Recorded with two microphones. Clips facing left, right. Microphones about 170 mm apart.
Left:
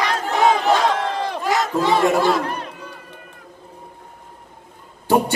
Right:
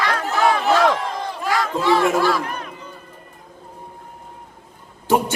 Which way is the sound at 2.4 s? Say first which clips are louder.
Left 2 dB; 30° left (ahead or behind).